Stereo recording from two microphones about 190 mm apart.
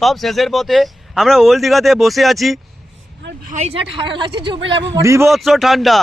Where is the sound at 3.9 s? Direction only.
25° right (ahead or behind).